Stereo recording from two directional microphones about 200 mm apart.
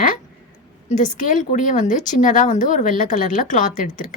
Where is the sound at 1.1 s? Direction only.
40° left (ahead or behind).